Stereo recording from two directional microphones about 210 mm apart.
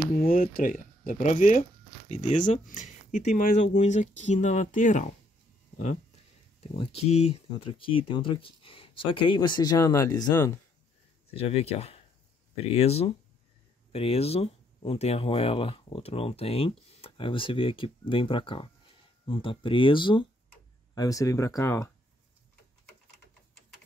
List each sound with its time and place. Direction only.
0.1 s speech: 45° left (ahead or behind)
6.6 s speech: 30° left (ahead or behind)
11.2 s speech: 30° left (ahead or behind)